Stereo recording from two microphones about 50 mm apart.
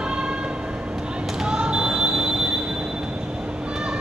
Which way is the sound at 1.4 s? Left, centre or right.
Centre.